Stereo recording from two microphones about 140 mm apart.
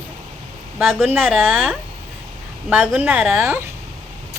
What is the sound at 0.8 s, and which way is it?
Speech, centre (ahead or behind).